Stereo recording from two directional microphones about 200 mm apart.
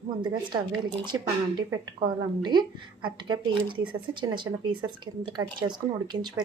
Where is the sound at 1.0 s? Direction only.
20° right (ahead or behind).